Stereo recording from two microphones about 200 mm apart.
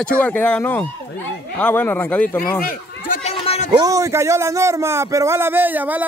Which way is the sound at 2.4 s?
45° left (ahead or behind).